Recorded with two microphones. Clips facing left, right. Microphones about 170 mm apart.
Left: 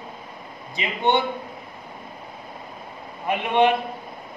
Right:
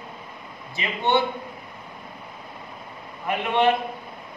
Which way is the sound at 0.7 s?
15° left (ahead or behind).